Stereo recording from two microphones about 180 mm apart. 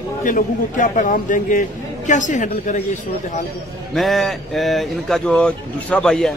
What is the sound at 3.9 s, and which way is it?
Speech, centre (ahead or behind).